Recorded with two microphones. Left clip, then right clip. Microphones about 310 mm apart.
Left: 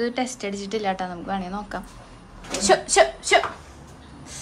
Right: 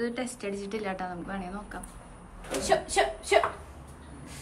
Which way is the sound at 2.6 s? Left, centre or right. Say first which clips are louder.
Left 8 dB; left.